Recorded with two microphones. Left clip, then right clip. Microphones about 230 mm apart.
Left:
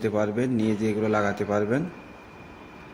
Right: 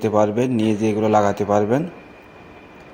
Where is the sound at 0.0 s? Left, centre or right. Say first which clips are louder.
Right 8 dB; centre.